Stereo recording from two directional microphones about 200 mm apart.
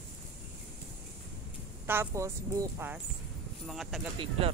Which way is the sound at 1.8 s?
15° right (ahead or behind).